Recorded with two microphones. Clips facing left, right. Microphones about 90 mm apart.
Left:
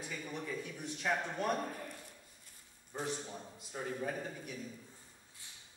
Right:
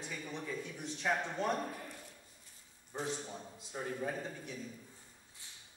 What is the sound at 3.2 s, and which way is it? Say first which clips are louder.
Speech: even; centre (ahead or behind).